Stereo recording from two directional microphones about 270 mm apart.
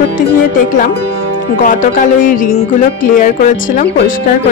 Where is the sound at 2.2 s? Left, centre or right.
Left.